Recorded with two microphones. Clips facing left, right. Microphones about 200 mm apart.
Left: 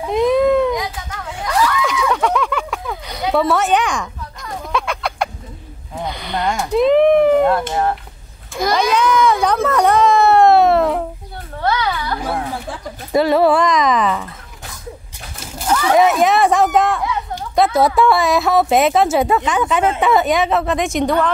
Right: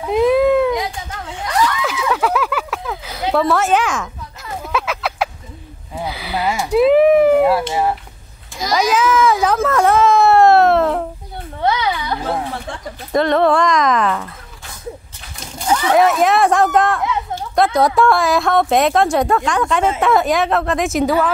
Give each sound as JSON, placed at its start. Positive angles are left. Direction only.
{"t": 0.0, "sound": "baby cry", "side_deg": -5}
{"t": 1.9, "sound": "a sound", "side_deg": -5}
{"t": 5.9, "sound": "a woman's voice", "side_deg": -5}
{"t": 11.6, "sound": "a sound", "side_deg": -20}
{"t": 12.5, "sound": "speech", "side_deg": 5}
{"t": 15.9, "sound": "a woman's voice", "side_deg": 0}